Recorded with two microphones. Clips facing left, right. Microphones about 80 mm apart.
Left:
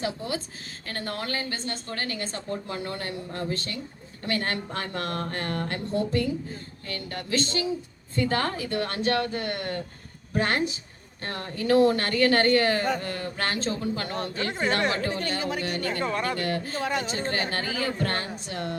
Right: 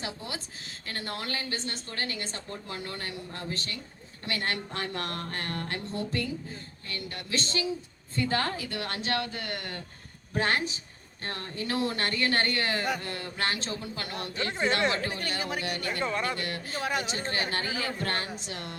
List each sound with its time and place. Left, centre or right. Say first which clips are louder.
0.0 s a woman's voice: left 7 dB; left